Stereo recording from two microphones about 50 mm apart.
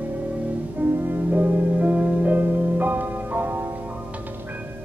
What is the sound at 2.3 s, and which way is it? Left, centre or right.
Music, right.